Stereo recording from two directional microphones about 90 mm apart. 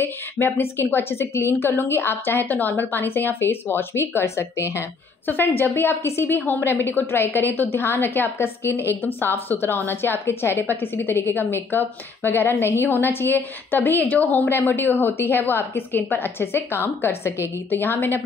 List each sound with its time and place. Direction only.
0.0 s a woman's voice: 25° left (ahead or behind)